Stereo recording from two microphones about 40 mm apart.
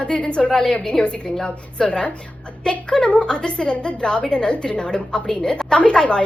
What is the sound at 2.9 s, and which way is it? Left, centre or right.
A woman's voice, left.